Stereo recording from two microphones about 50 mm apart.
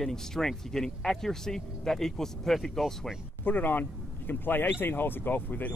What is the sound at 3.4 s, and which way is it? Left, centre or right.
Speech, left.